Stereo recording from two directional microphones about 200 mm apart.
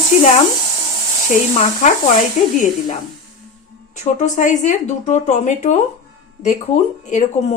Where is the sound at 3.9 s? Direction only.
35° left (ahead or behind).